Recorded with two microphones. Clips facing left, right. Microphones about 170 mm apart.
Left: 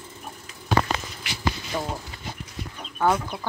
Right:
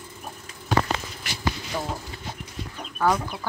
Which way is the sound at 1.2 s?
45° right (ahead or behind).